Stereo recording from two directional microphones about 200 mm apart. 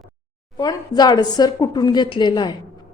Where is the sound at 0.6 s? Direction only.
20° left (ahead or behind).